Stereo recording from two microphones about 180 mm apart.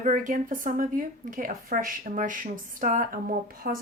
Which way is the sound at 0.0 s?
45° right (ahead or behind).